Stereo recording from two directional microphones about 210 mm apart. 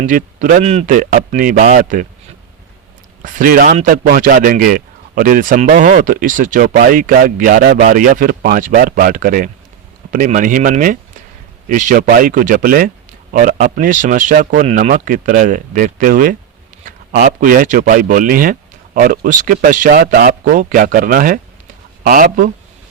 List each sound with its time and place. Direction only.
0.0 s a man's voice: 35° right (ahead or behind)
3.2 s a man's voice: 40° right (ahead or behind)